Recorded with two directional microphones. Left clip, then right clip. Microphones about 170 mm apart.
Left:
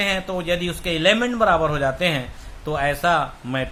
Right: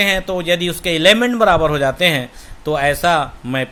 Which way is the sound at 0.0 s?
45° right (ahead or behind).